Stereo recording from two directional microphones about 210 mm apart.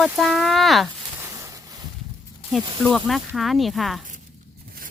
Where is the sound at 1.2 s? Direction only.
15° right (ahead or behind).